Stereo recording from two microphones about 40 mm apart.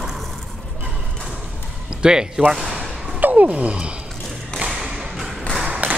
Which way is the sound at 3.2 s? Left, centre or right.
Right.